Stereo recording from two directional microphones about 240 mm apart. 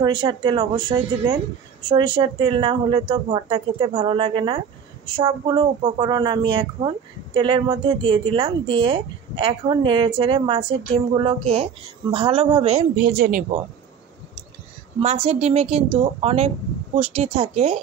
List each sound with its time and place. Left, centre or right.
0.0 s speech: centre
12.9 s speech: right
15.0 s speech: right